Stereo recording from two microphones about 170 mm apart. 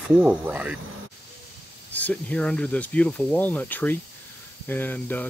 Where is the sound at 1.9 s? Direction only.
10° left (ahead or behind).